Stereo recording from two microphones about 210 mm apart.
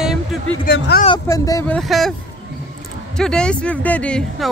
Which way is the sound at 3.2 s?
5° left (ahead or behind).